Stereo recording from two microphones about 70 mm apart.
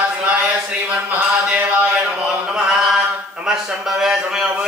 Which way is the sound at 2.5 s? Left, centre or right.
Centre.